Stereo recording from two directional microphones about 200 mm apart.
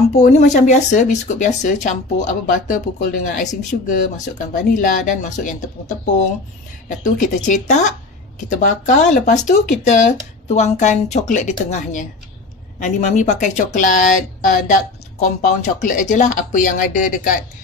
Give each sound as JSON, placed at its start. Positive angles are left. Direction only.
{"t": 0.2, "sound": "speech", "side_deg": 35}